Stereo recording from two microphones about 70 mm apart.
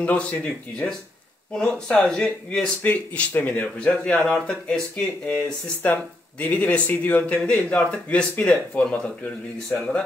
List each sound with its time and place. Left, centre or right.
0.0 s speech: centre
2.8 s speech: left
6.4 s speech: left